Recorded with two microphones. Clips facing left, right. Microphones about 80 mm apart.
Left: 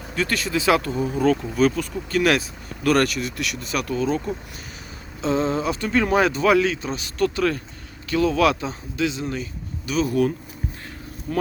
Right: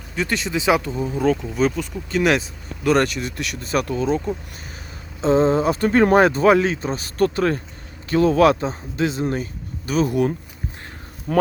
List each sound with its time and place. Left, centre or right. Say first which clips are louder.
0.2 s speech: right 1 dB; right
0.9 s speech: even; centre
1.8 s speech: right 1 dB; right
5.2 s speech: right 5 dB; right
10.1 s speech: right 1 dB; right
11.3 s speech: right 7 dB; right